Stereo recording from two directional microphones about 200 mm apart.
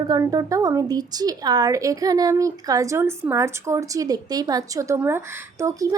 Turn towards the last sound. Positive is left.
turn(degrees=-15)  # may be behind; listen again after turning